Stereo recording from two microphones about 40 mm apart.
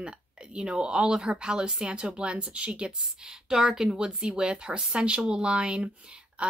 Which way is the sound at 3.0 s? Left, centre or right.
Centre.